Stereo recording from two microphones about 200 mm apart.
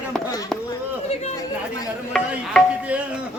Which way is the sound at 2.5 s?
5° left (ahead or behind).